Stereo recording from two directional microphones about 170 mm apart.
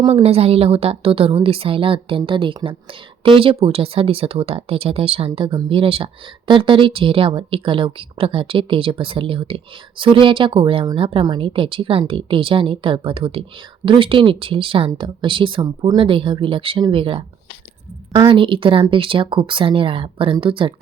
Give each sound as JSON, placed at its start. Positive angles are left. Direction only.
{"t": 0.0, "sound": "a woman's voice", "side_deg": -35}